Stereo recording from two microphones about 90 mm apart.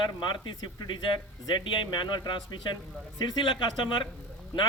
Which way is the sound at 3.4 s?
60° left (ahead or behind).